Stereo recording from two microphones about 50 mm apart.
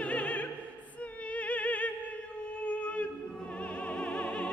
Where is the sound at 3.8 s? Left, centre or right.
Left.